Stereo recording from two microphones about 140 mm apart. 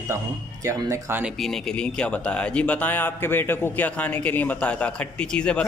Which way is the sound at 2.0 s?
10° left (ahead or behind).